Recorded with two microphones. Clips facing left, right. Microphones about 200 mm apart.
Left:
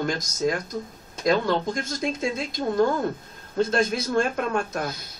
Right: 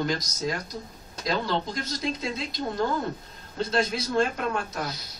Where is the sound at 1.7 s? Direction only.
50° left (ahead or behind).